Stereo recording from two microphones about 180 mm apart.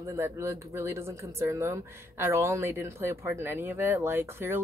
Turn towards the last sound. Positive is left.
turn(degrees=-15)  # may be behind; listen again after turning